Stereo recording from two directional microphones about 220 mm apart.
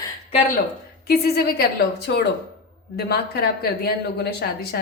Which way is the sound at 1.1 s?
45° left (ahead or behind).